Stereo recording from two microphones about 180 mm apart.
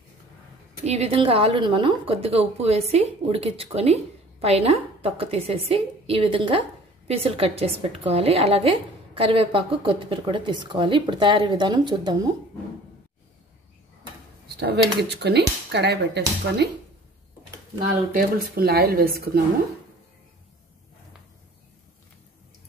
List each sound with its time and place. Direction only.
0.8 s a woman's voice: 35° right (ahead or behind)
15.2 s speech: 70° right (ahead or behind)
18.1 s speech: 55° right (ahead or behind)